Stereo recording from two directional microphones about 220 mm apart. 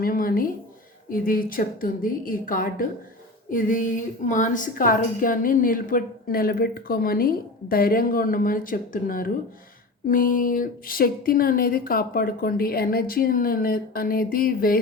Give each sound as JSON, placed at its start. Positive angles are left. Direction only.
{"t": 0.0, "sound": "a woman's voice", "side_deg": 40}